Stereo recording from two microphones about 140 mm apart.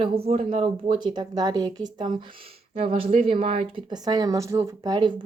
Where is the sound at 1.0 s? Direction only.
30° right (ahead or behind).